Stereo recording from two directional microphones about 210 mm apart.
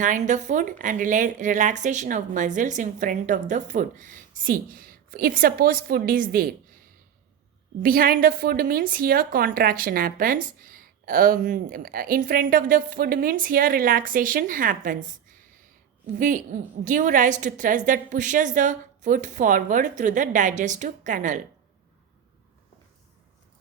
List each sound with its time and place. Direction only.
0.0 s speech: 35° right (ahead or behind)
7.8 s a woman's voice: 45° right (ahead or behind)